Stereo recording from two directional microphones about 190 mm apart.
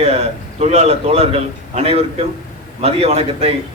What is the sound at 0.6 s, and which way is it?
A man's voice, 35° right (ahead or behind).